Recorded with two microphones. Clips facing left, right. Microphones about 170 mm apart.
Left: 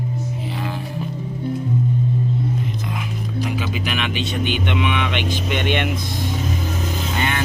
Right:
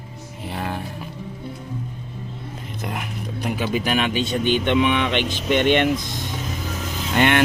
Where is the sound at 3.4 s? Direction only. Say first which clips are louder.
Right 5 dB; 50° right (ahead or behind).